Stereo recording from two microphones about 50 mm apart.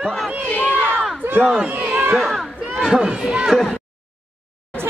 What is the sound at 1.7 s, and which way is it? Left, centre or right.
Speech, right.